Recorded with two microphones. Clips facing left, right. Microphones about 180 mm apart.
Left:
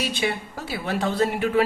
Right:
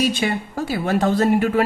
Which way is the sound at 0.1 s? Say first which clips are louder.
Right 4 dB; 45° right (ahead or behind).